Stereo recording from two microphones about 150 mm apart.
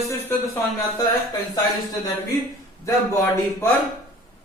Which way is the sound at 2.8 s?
15° left (ahead or behind).